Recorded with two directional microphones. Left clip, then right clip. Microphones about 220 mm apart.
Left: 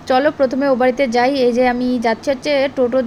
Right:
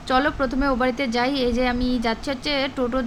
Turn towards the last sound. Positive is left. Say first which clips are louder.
# left 8 dB
turn(degrees=0)  # may be behind; listen again after turning